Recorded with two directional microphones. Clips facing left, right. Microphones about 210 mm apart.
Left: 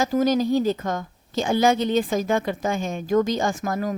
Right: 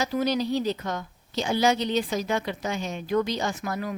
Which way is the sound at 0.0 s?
45° left (ahead or behind).